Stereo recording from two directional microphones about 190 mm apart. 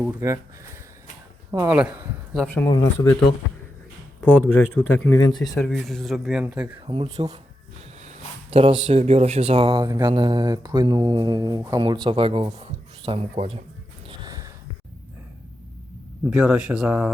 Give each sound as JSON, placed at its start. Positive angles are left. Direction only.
{"t": 0.0, "sound": "speech", "side_deg": -15}
{"t": 1.5, "sound": "speech", "side_deg": -10}
{"t": 2.6, "sound": "speech", "side_deg": 20}
{"t": 4.2, "sound": "speech", "side_deg": 5}
{"t": 6.8, "sound": "speech", "side_deg": -30}
{"t": 14.1, "sound": "a sound", "side_deg": -20}
{"t": 16.3, "sound": "speech", "side_deg": -5}